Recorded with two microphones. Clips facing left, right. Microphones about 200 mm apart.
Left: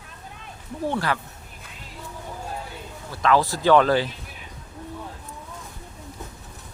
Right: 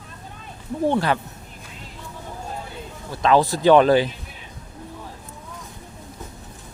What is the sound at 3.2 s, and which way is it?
Speech, 20° right (ahead or behind).